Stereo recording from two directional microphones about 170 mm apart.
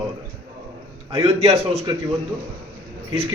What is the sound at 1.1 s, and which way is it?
Speech, 40° right (ahead or behind).